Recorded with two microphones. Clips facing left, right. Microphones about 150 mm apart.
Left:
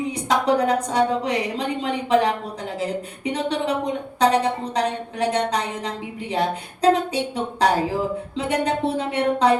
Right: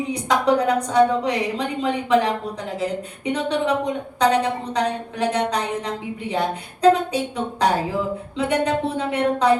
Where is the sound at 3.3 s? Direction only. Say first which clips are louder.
Right 2 dB; 30° left (ahead or behind).